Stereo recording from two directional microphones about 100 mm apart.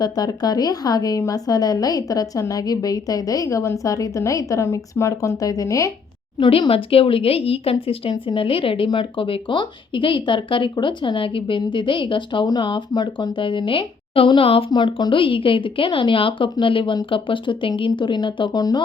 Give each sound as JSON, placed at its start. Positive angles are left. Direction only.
{"t": 0.0, "sound": "a woman's voice", "side_deg": 40}
{"t": 6.4, "sound": "speech", "side_deg": 65}
{"t": 8.1, "sound": "speech", "side_deg": 60}
{"t": 14.7, "sound": "speech", "side_deg": 55}